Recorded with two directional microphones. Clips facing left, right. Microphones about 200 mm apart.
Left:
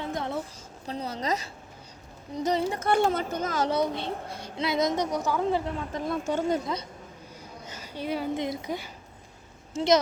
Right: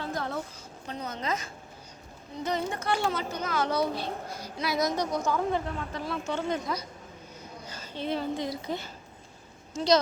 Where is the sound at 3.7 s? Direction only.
20° left (ahead or behind).